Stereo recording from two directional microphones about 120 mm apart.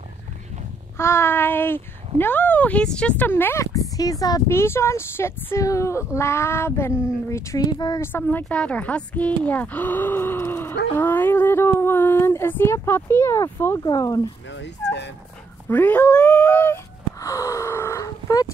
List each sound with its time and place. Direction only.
0.9 s speech: 20° left (ahead or behind)
8.0 s speech: 15° left (ahead or behind)
15.7 s wail: 15° left (ahead or behind); by 18.5 s 30° left (ahead or behind)